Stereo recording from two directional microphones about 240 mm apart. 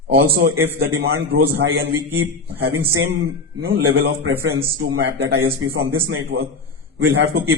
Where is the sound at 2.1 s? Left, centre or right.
Right.